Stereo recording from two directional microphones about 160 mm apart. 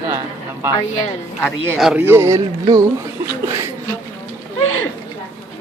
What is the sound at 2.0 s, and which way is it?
A man's voice, 15° right (ahead or behind).